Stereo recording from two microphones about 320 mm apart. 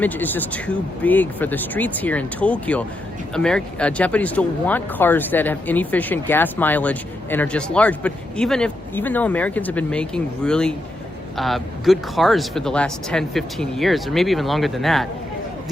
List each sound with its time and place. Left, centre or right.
0.0 s speech: centre